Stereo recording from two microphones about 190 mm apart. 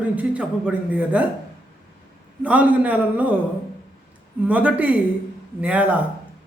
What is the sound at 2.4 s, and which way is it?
Speech, 5° right (ahead or behind).